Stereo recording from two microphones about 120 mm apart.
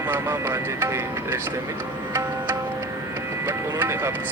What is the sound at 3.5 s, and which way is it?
Speech, 20° right (ahead or behind).